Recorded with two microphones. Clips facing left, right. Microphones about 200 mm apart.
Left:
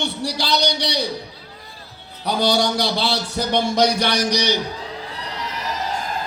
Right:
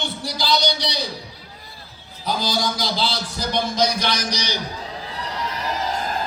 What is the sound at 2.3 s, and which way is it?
A man's voice, 70° left (ahead or behind).